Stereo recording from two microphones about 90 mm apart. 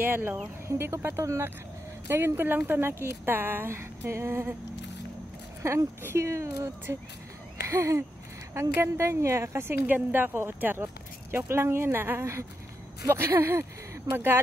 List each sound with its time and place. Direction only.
0.0 s speech: 25° right (ahead or behind)
5.6 s speech: 30° right (ahead or behind)